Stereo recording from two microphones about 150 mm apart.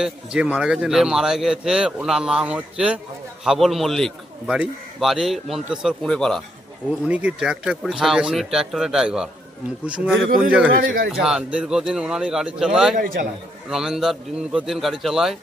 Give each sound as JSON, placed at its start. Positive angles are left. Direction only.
{"t": 0.0, "sound": "a man's voice", "side_deg": -5}
{"t": 7.0, "sound": "a man's voice", "side_deg": -10}
{"t": 10.8, "sound": "speech", "side_deg": -75}
{"t": 11.1, "sound": "a man's voice", "side_deg": -5}